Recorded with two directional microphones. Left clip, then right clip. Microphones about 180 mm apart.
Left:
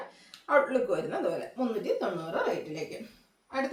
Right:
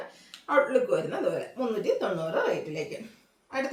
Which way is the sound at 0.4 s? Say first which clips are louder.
Right 1 dB; 15° right (ahead or behind).